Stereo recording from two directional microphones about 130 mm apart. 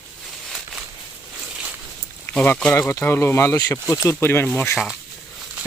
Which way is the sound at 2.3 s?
10° left (ahead or behind).